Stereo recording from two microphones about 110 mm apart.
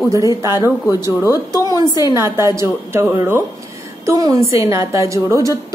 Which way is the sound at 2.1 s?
25° right (ahead or behind).